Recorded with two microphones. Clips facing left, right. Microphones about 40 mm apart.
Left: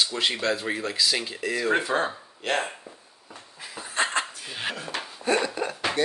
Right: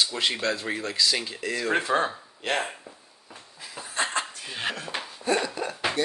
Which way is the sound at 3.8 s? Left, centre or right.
Left.